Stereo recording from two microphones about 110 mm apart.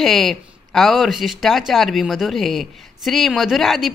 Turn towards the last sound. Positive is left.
turn(degrees=0)  # may be behind; listen again after turning